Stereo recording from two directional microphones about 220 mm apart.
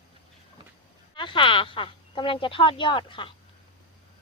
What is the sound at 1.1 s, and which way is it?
Speech, 20° left (ahead or behind).